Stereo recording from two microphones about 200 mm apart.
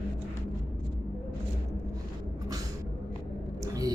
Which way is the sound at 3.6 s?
15° right (ahead or behind).